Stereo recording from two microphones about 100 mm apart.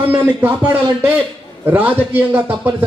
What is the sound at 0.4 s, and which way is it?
A man's voice, 20° right (ahead or behind).